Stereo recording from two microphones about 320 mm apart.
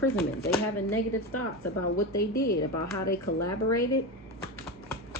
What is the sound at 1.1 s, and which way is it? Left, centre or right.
Speech, left.